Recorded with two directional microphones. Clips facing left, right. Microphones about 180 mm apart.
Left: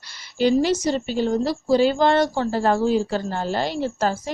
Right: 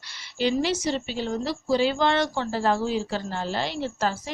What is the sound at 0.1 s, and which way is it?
A woman's voice, 45° left (ahead or behind).